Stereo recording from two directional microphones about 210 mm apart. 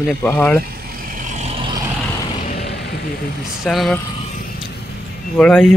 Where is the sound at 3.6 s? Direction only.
Centre (ahead or behind).